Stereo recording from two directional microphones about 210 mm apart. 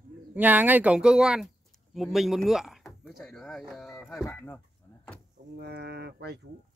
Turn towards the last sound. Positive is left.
turn(degrees=-50)  # may be behind; listen again after turning